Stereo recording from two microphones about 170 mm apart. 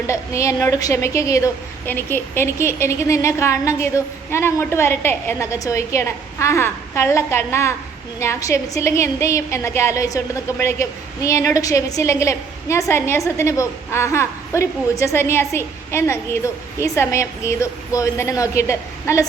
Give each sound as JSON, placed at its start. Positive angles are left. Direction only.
{"t": 0.1, "sound": "a woman's voice", "side_deg": 15}